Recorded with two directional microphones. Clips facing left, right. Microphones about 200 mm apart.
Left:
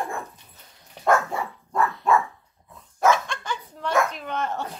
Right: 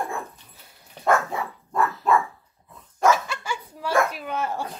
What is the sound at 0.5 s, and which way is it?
Dog, 5° right (ahead or behind).